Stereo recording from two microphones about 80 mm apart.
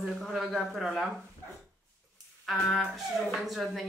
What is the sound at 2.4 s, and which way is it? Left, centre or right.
A woman's voice, centre.